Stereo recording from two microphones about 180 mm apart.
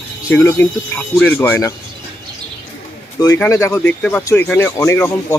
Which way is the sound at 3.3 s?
15° left (ahead or behind).